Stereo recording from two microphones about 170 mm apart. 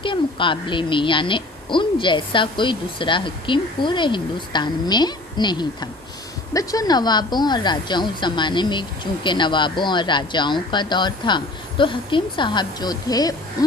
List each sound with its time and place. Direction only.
0.0 s a woman's voice: 30° left (ahead or behind)